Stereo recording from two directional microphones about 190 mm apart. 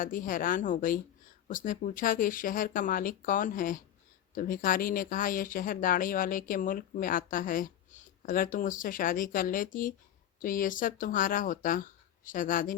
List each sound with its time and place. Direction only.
0.0 s speech: 45° left (ahead or behind)